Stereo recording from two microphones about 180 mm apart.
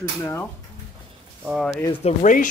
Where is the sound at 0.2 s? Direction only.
15° left (ahead or behind).